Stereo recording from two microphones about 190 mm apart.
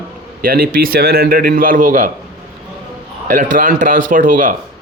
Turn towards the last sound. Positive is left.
turn(degrees=-45)  # may be behind; listen again after turning